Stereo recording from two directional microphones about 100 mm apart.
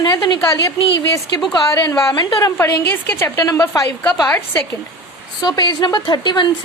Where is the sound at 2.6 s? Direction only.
25° left (ahead or behind).